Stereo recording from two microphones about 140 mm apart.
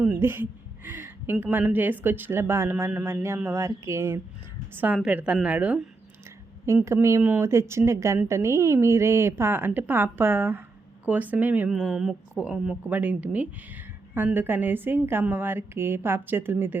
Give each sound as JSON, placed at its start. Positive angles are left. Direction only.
{"t": 0.0, "sound": "speech", "side_deg": -10}